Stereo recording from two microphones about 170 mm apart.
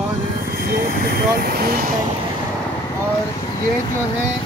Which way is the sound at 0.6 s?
60° right (ahead or behind).